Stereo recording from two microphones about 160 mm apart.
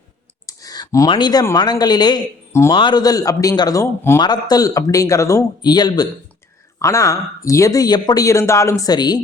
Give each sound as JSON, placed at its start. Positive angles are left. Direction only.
{"t": 0.4, "sound": "clicking", "side_deg": 25}
{"t": 1.1, "sound": "speech", "side_deg": 25}